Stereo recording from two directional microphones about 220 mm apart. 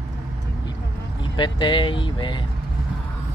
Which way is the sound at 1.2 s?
20° left (ahead or behind).